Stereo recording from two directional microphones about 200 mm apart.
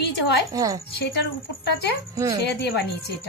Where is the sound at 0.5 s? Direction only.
20° right (ahead or behind).